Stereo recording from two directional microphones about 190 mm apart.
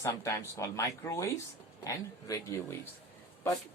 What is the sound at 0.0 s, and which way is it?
Speech, 15° left (ahead or behind).